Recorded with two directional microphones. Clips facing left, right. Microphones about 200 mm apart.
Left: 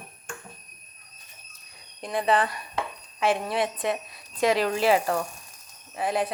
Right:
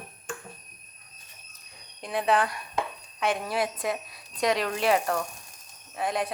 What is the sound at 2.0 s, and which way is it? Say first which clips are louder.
A woman's voice: left 1 dB; centre (ahead or behind).